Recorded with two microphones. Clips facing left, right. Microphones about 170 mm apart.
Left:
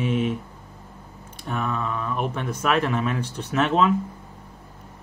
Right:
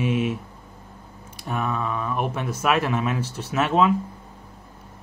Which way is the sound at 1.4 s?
10° right (ahead or behind).